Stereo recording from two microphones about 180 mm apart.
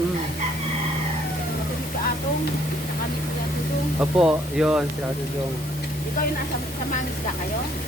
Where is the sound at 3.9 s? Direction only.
5° right (ahead or behind).